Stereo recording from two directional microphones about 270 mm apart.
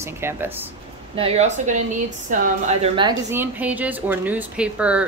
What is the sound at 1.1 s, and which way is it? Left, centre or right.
A woman's voice, right.